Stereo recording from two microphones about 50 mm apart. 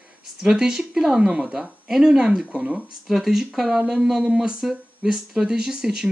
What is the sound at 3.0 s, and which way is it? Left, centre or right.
Speech, centre.